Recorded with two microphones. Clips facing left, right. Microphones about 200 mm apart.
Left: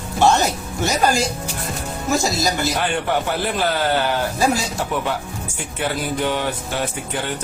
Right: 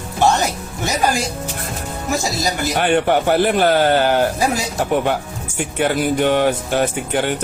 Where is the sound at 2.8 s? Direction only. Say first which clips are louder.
Right 6 dB; 60° right (ahead or behind).